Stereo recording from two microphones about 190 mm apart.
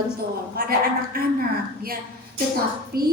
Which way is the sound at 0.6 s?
50° right (ahead or behind).